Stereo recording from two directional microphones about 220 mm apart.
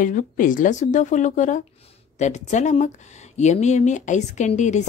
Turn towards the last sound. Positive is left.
turn(degrees=30)  # may be behind; listen again after turning